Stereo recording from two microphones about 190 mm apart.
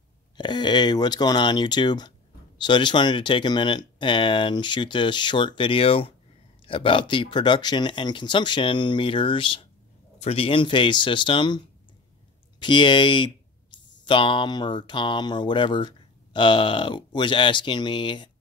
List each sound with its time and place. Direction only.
0.4 s speech: 25° left (ahead or behind)